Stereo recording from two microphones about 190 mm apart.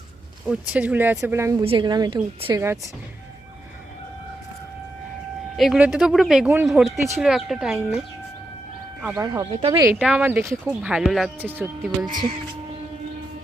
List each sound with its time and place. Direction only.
0.4 s speech: 5° right (ahead or behind)
1.6 s a woman's voice: 25° right (ahead or behind)
5.5 s speech: centre (ahead or behind)
9.1 s a woman's voice: 20° right (ahead or behind)
9.5 s speech: 30° right (ahead or behind)
10.0 s speech: 5° right (ahead or behind)